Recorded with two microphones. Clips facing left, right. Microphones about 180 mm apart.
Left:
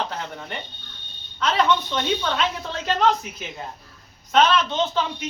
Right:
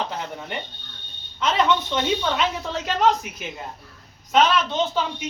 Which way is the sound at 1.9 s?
10° right (ahead or behind).